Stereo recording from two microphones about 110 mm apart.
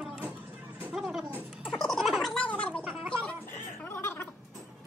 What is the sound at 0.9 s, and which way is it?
Music, 5° right (ahead or behind).